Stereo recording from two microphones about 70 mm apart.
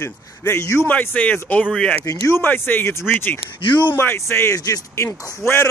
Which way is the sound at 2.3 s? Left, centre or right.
Left.